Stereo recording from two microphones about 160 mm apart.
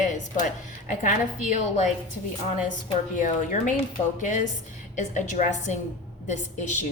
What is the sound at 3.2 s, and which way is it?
Speech, 50° left (ahead or behind).